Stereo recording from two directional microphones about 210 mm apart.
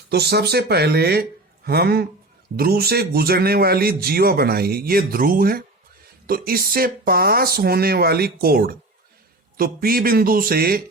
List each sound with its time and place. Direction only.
0.1 s a man's voice: 50° right (ahead or behind)